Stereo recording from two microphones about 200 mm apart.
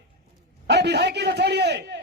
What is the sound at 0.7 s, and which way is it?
Speech, 60° right (ahead or behind).